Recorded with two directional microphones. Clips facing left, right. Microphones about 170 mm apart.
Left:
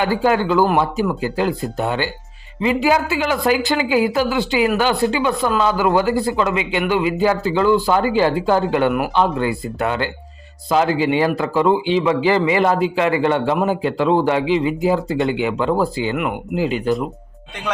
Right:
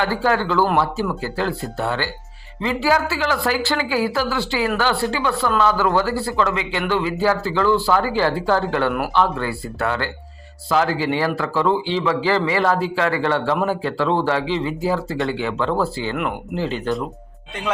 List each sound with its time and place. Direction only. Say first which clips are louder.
0.0 s a man's voice: left 3 dB; 15° left (ahead or behind)